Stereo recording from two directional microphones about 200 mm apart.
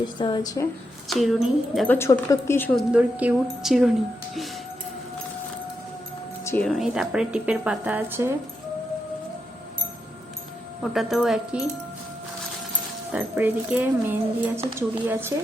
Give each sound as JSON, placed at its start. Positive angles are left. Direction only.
{"t": 0.2, "sound": "speech", "side_deg": 20}
{"t": 1.0, "sound": "a woman's voice", "side_deg": 0}
{"t": 2.9, "sound": "a woman's voice", "side_deg": -5}
{"t": 6.4, "sound": "music", "side_deg": 15}
{"t": 6.7, "sound": "a woman's voice", "side_deg": 0}
{"t": 10.9, "sound": "a woman's voice", "side_deg": 0}
{"t": 13.1, "sound": "speech", "side_deg": -10}